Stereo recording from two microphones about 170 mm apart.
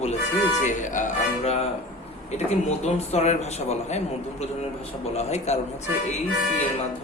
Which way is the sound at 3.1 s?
40° left (ahead or behind).